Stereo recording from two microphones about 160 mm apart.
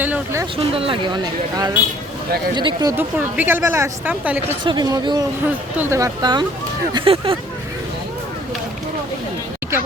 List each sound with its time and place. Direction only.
0.0 s speech: 10° right (ahead or behind)
0.5 s speech: 35° right (ahead or behind)
2.9 s speech: 10° right (ahead or behind)
4.1 s speech: 10° right (ahead or behind)
4.6 s speech: 30° right (ahead or behind)
5.7 s speech: 15° right (ahead or behind)
6.9 s speech: 35° right (ahead or behind)